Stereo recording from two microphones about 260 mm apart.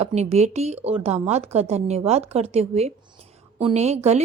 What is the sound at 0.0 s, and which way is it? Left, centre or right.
Speech, right.